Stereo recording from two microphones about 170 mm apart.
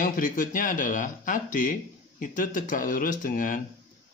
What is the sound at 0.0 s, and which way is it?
Speech, 50° left (ahead or behind).